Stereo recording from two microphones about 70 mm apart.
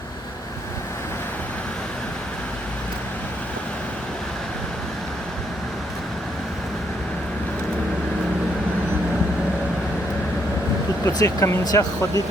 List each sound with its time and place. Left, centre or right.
11.0 s speech: left